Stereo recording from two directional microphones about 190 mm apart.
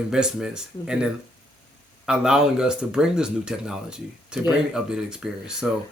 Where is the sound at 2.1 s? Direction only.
5° right (ahead or behind).